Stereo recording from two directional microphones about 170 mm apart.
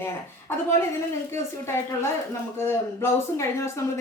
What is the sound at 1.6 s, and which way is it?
Speech, 15° left (ahead or behind).